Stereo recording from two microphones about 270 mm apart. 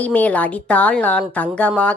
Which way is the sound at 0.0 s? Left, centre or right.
Centre.